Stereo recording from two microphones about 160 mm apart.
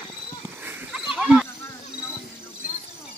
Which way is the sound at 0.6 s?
5° right (ahead or behind).